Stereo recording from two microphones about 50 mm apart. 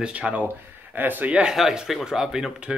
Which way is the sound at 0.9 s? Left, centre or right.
Right.